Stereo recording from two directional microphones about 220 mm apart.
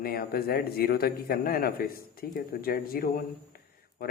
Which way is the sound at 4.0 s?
45° left (ahead or behind).